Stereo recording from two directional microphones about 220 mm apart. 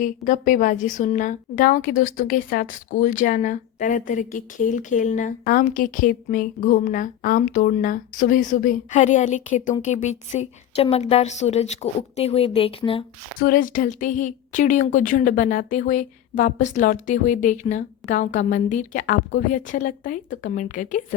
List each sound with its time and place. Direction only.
0.0 s a woman's voice: 35° left (ahead or behind)
13.4 s a woman's voice: 40° left (ahead or behind)